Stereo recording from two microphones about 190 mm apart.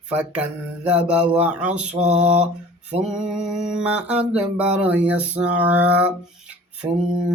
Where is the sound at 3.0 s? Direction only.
5° right (ahead or behind).